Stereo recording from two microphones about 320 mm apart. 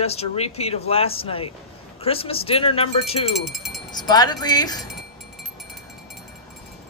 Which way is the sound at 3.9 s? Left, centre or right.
Centre.